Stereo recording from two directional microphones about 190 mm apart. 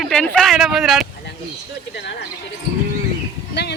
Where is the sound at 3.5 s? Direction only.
60° left (ahead or behind).